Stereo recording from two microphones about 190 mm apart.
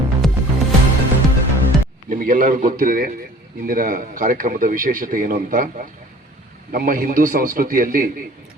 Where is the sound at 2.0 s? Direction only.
45° right (ahead or behind).